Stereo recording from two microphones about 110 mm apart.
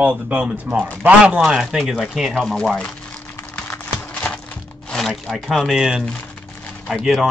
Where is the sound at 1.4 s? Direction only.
Centre (ahead or behind).